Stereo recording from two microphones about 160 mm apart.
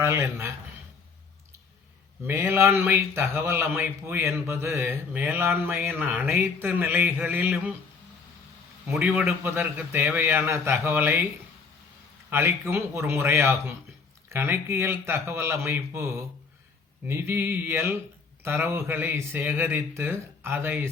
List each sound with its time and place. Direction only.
0.0 s speech: 15° right (ahead or behind)
2.2 s speech: 15° right (ahead or behind)
8.9 s speech: 10° right (ahead or behind)
12.3 s speech: 15° right (ahead or behind)